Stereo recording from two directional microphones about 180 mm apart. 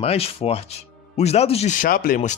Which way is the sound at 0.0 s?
35° left (ahead or behind).